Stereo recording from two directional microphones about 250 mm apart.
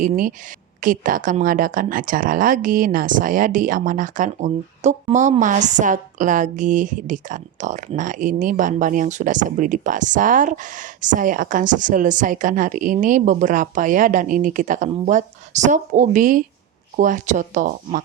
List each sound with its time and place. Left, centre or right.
0.0 s speech: right